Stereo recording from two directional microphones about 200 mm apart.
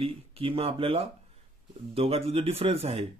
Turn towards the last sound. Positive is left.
turn(degrees=-30)  # may be behind; listen again after turning